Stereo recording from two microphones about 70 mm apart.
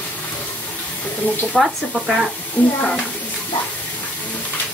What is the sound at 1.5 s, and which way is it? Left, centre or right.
Speech, centre.